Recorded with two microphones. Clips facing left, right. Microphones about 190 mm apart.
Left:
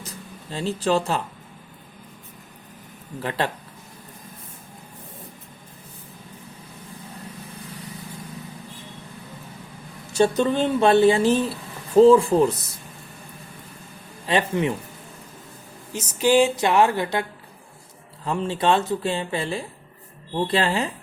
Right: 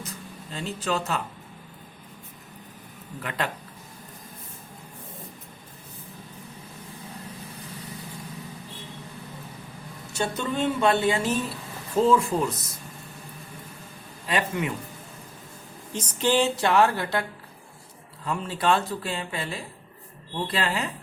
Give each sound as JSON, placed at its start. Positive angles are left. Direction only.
{"t": 0.5, "sound": "speech", "side_deg": 30}
{"t": 3.2, "sound": "speech", "side_deg": 30}
{"t": 10.2, "sound": "speech", "side_deg": 35}
{"t": 14.3, "sound": "speech", "side_deg": 30}
{"t": 15.9, "sound": "speech", "side_deg": 10}
{"t": 18.3, "sound": "speech", "side_deg": 25}